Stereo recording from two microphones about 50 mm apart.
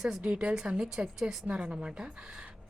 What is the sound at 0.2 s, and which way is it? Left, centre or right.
Speech, right.